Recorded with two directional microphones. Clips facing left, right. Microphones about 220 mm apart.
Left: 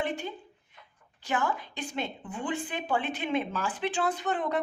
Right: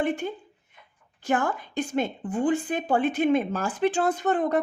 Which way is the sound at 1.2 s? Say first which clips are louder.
Right 5 dB; 50° right (ahead or behind).